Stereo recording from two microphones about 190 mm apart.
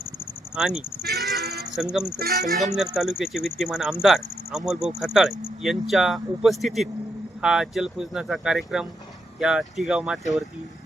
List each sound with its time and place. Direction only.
0.5 s speech: 5° right (ahead or behind)
1.0 s music: 55° right (ahead or behind)
1.7 s speech: 5° right (ahead or behind)
2.1 s speech: 55° right (ahead or behind)
2.6 s speech: centre (ahead or behind)